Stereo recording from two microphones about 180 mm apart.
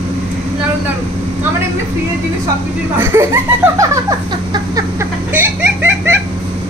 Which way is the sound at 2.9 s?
15° right (ahead or behind).